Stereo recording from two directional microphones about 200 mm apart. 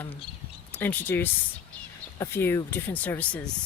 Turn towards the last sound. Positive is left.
turn(degrees=5)  # may be behind; listen again after turning